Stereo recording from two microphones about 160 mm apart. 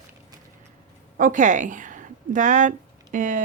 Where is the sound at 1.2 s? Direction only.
55° right (ahead or behind).